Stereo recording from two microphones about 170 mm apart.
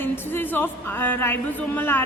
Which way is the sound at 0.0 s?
10° left (ahead or behind).